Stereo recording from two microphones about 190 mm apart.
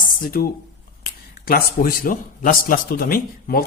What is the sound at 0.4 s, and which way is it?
A man's voice, 50° left (ahead or behind).